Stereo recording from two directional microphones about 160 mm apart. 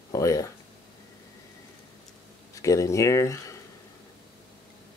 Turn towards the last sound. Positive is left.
turn(degrees=20)  # may be behind; listen again after turning